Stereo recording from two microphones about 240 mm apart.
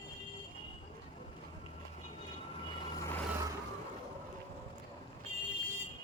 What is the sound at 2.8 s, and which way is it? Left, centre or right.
Vehicle, centre.